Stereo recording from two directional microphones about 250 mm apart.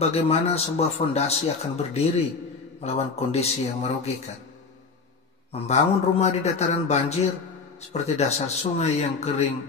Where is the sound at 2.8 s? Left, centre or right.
Left.